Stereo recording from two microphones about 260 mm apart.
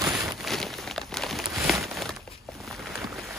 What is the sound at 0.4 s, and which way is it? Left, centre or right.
Crumpling, centre.